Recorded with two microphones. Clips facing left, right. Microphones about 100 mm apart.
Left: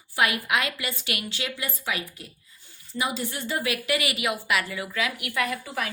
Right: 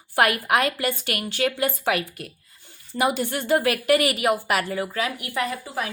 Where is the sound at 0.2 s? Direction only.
55° right (ahead or behind).